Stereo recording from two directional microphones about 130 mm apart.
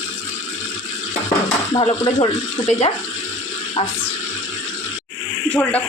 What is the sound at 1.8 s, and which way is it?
Speech, 50° left (ahead or behind).